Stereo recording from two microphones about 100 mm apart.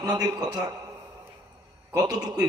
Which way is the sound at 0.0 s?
45° right (ahead or behind).